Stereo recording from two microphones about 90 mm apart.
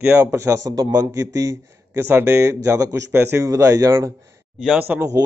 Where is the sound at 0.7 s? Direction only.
45° right (ahead or behind); by 3.4 s 25° right (ahead or behind).